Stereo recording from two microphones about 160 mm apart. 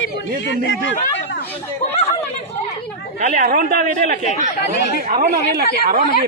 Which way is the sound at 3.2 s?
50° right (ahead or behind).